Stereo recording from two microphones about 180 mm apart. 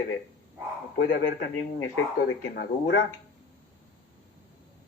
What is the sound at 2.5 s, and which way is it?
Speech, 70° left (ahead or behind).